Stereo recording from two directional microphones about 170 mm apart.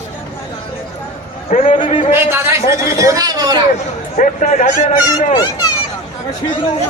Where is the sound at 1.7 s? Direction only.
35° left (ahead or behind).